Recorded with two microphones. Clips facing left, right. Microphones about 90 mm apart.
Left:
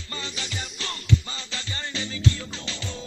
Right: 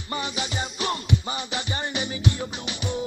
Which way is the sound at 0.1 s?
20° right (ahead or behind).